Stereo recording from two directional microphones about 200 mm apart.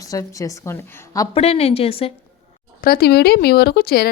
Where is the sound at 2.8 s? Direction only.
50° left (ahead or behind).